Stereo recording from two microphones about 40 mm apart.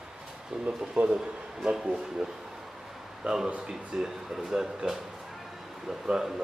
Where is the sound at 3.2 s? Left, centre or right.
Centre.